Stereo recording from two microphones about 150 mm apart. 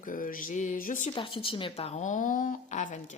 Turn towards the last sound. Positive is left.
turn(degrees=55)  # may be behind; listen again after turning